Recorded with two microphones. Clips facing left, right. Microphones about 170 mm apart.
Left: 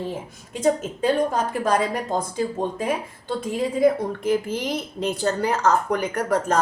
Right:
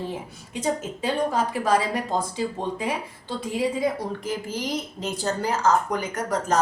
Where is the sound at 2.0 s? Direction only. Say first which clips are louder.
Left 1 dB; 45° left (ahead or behind).